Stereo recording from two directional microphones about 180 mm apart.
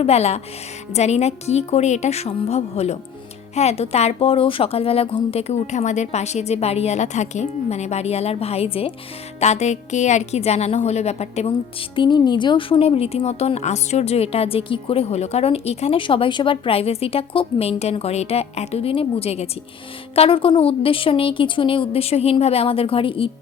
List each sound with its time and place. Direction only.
0.0 s a woman's voice: 35° left (ahead or behind)